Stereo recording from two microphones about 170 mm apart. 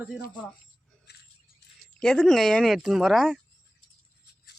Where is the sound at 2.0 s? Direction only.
5° left (ahead or behind).